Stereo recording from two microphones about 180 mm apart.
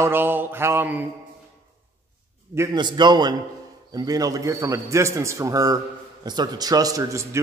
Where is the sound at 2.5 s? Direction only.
20° right (ahead or behind).